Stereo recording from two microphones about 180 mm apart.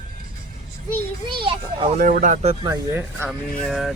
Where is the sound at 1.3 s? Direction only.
30° right (ahead or behind).